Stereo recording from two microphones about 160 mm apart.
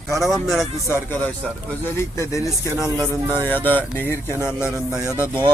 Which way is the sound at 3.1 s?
20° right (ahead or behind).